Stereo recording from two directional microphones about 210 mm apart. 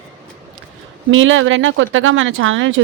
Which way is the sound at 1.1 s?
65° right (ahead or behind).